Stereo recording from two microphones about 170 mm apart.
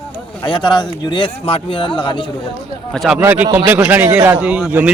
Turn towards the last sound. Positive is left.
turn(degrees=-5)  # may be behind; listen again after turning